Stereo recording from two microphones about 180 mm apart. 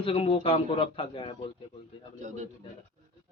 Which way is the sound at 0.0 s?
30° left (ahead or behind).